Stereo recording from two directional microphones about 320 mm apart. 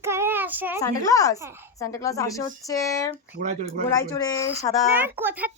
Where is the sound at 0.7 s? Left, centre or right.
Centre.